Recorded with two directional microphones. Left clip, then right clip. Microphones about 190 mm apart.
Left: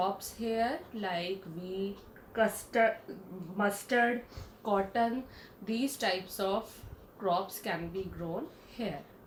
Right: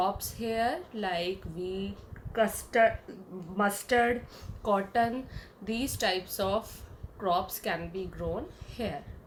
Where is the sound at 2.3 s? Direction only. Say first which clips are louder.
Right 2 dB; 50° right (ahead or behind).